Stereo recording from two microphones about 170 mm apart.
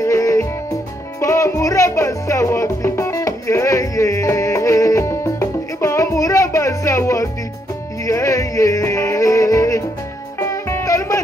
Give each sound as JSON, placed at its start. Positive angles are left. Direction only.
{"t": 0.0, "sound": "music", "side_deg": 20}